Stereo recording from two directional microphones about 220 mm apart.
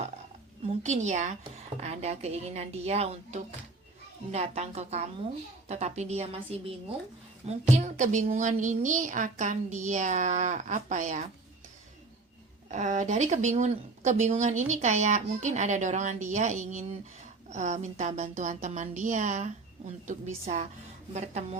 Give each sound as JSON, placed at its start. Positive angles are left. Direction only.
{"t": 0.6, "sound": "a woman's voice", "side_deg": -30}
{"t": 12.6, "sound": "a woman's voice", "side_deg": -35}